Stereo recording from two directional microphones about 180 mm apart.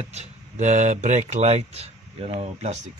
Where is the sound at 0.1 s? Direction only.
40° right (ahead or behind).